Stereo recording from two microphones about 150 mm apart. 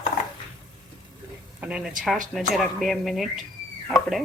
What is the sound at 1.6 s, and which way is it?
Speech, 5° right (ahead or behind).